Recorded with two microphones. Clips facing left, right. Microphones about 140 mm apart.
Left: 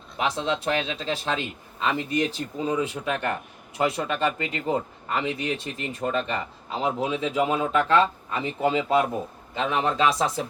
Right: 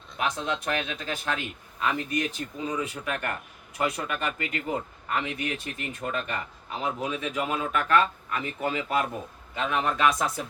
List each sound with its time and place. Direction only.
0.2 s speech: 30° left (ahead or behind)